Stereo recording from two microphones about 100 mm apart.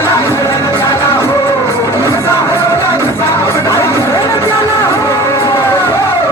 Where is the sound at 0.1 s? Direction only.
35° left (ahead or behind).